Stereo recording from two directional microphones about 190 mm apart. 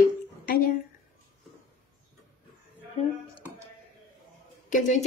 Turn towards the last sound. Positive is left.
turn(degrees=40)  # may be behind; listen again after turning